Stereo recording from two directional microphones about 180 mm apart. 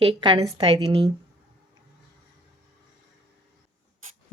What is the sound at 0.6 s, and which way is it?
Speech, 35° right (ahead or behind).